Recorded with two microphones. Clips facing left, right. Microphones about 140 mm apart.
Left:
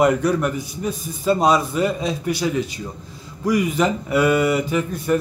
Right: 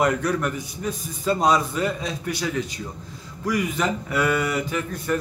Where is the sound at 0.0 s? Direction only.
15° left (ahead or behind).